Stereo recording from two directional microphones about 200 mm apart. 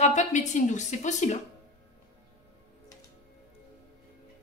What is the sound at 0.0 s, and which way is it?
A woman's voice, 35° left (ahead or behind).